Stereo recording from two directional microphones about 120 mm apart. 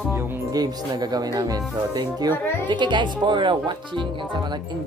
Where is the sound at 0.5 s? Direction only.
35° right (ahead or behind).